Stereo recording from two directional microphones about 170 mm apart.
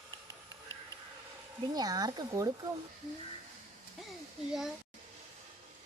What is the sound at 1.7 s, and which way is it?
Speech, 20° right (ahead or behind).